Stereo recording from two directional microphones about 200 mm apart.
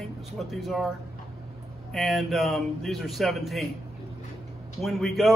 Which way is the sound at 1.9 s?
Centre (ahead or behind).